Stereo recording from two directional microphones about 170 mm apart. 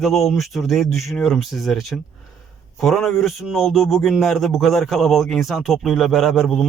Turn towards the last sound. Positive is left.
turn(degrees=0)  # may be behind; listen again after turning